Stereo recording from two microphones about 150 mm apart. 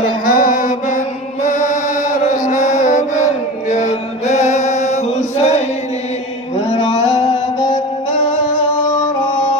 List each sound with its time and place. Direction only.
0.0 s music: 65° left (ahead or behind)
2.1 s mantra: 55° left (ahead or behind)
3.7 s chant: 50° left (ahead or behind)
6.7 s a sound: 45° left (ahead or behind)